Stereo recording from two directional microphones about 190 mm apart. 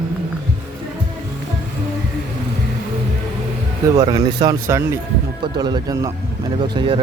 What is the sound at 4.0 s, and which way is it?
Speech, 20° right (ahead or behind).